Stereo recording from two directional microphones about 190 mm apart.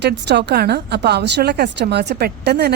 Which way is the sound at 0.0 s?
65° right (ahead or behind).